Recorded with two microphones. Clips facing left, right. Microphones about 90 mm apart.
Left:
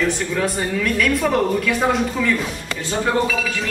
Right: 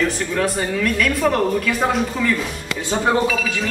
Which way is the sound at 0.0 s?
Centre (ahead or behind).